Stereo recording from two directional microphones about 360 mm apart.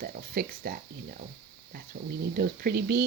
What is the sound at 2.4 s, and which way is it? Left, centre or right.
Speech, right.